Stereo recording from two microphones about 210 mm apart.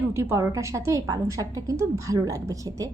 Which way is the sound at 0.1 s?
15° right (ahead or behind).